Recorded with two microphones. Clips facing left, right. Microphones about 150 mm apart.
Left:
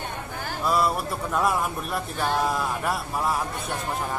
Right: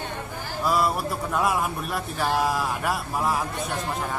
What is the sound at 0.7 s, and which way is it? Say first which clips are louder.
Speech: even; centre (ahead or behind).